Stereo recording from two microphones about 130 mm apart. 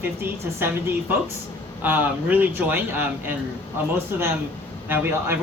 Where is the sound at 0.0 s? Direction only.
15° right (ahead or behind).